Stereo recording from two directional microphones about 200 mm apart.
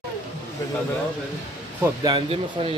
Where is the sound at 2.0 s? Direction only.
25° right (ahead or behind).